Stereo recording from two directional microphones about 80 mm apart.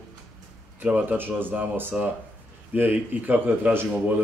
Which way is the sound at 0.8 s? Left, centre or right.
Right.